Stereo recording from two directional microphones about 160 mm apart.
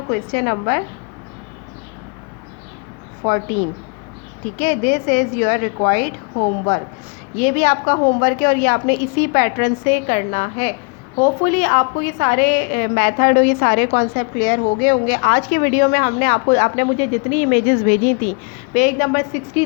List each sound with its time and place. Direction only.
0.1 s a woman's voice: 60° left (ahead or behind)
3.2 s a woman's voice: 50° left (ahead or behind)
4.6 s a woman's voice: 50° left (ahead or behind)
7.3 s a woman's voice: 50° left (ahead or behind)
11.2 s a woman's voice: 55° left (ahead or behind)